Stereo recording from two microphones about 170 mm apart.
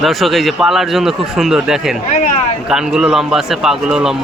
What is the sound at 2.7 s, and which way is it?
A man's voice, 5° right (ahead or behind).